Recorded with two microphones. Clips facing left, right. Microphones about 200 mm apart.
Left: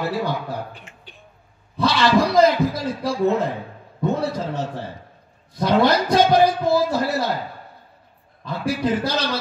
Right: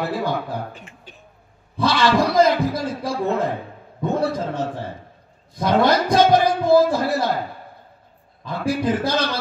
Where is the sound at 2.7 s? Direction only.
55° right (ahead or behind).